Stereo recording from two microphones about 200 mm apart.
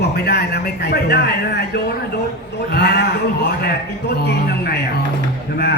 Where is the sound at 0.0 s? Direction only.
55° left (ahead or behind).